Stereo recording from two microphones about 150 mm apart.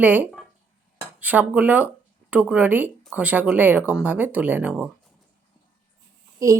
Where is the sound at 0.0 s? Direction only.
10° right (ahead or behind).